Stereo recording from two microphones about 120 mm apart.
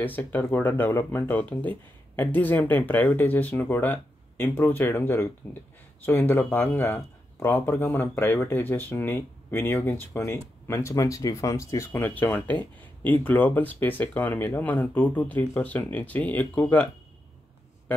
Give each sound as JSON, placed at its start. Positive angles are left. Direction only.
{"t": 0.0, "sound": "speech", "side_deg": 15}